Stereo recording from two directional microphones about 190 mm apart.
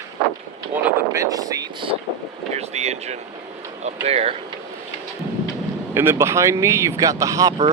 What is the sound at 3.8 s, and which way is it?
Speech, 35° right (ahead or behind).